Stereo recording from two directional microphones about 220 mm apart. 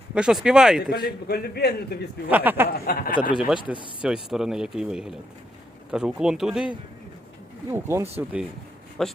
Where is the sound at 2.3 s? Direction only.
10° right (ahead or behind).